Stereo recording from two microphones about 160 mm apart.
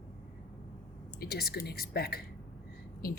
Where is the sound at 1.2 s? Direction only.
75° left (ahead or behind).